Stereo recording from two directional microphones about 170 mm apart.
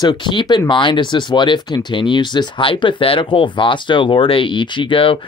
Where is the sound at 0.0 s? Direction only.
25° left (ahead or behind).